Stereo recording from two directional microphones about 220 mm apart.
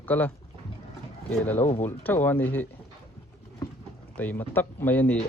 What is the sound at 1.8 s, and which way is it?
Speech, 10° left (ahead or behind).